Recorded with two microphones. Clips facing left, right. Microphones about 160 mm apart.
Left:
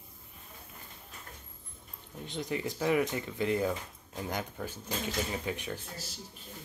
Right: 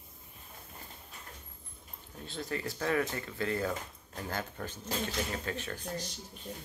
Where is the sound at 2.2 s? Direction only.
15° left (ahead or behind).